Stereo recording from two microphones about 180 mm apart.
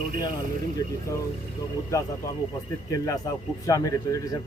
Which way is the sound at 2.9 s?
20° left (ahead or behind).